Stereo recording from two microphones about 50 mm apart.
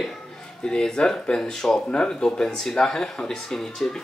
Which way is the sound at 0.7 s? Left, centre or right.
Centre.